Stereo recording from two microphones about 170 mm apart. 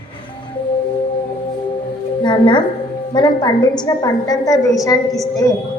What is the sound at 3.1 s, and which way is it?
A woman's voice, 25° left (ahead or behind).